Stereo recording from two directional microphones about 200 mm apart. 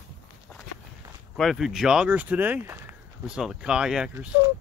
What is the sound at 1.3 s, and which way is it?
Speech, centre (ahead or behind).